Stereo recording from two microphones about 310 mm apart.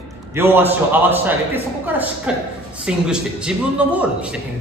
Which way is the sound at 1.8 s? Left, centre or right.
Centre.